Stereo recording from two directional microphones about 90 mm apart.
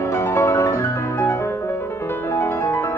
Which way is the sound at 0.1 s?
30° left (ahead or behind).